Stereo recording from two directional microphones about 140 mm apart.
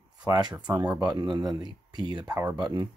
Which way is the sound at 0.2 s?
30° right (ahead or behind).